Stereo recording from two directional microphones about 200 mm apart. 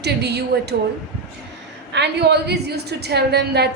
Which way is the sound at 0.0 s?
55° right (ahead or behind).